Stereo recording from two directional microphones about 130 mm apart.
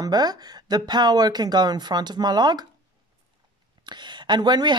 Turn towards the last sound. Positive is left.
turn(degrees=-35)  # may be behind; listen again after turning